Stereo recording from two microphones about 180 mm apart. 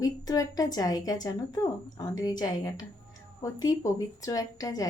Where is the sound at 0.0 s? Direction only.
20° left (ahead or behind).